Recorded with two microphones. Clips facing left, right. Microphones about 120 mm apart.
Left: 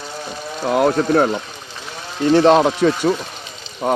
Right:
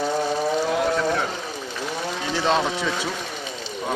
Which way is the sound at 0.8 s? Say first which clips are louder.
Left 7 dB; 50° left (ahead or behind).